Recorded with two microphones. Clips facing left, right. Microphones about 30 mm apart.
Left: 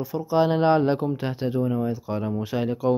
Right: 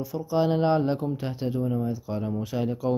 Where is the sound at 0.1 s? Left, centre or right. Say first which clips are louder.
Left 3 dB; centre.